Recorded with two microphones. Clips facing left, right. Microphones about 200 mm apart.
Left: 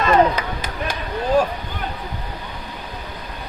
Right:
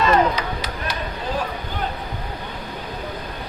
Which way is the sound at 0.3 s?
50° left (ahead or behind).